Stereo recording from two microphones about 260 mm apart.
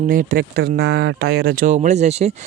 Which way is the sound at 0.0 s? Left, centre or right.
Right.